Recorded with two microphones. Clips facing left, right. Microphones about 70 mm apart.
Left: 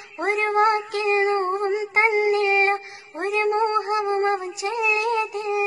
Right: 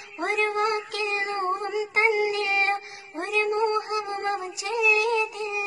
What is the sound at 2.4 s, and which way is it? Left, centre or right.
Music, left.